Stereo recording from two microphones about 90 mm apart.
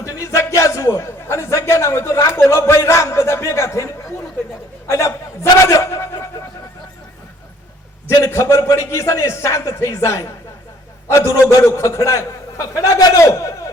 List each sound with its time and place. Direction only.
0.0 s a man's voice: 35° left (ahead or behind)
4.9 s a sound: 30° left (ahead or behind)
8.0 s a man's voice: 30° left (ahead or behind)